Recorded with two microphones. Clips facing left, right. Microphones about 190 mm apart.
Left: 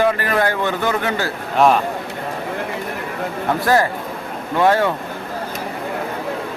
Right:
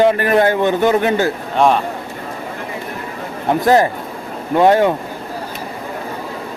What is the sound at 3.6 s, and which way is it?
A man's voice, 20° right (ahead or behind).